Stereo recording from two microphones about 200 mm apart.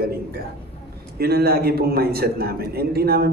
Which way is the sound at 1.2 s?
50° right (ahead or behind).